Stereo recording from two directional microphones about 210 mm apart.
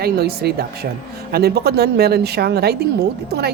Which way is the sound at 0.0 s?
50° right (ahead or behind).